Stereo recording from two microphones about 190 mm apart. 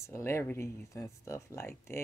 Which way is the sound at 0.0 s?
15° left (ahead or behind).